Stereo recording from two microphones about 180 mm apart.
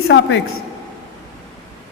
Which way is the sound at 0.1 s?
90° left.